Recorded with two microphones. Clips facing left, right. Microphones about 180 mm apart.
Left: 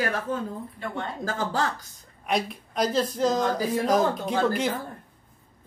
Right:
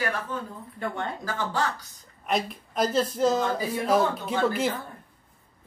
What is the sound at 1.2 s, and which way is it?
Speech, 45° left (ahead or behind).